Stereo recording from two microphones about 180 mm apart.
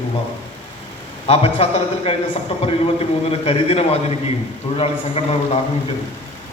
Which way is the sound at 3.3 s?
35° left (ahead or behind).